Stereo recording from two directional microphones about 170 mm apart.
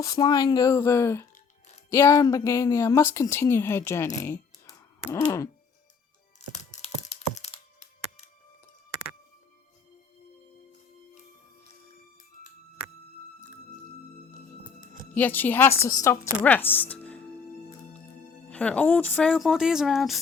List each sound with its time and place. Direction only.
0.0 s a woman's voice: 20° left (ahead or behind)
6.5 s crushing: 45° left (ahead or behind)
15.1 s a woman's voice: 10° left (ahead or behind)
18.4 s speech: 10° left (ahead or behind)
19.3 s speech: centre (ahead or behind)